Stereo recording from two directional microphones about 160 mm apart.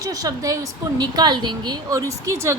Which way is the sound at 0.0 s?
20° right (ahead or behind).